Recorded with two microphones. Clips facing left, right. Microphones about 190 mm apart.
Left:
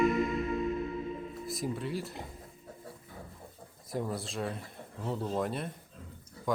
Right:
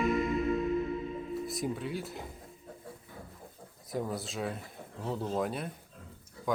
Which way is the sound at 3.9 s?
Centre (ahead or behind).